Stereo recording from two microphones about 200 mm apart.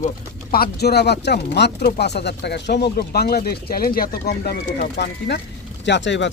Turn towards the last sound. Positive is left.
turn(degrees=65)  # may be behind; listen again after turning